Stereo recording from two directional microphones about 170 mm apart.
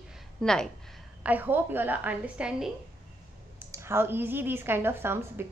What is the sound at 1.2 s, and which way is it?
A woman's voice, 10° right (ahead or behind).